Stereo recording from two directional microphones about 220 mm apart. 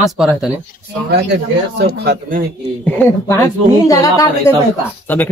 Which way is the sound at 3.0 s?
10° left (ahead or behind).